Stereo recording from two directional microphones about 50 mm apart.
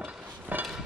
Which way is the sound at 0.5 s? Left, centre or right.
Right.